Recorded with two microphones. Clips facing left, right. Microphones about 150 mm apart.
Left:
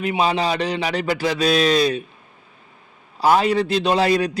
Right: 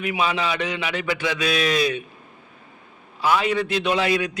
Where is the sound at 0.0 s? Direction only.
35° left (ahead or behind).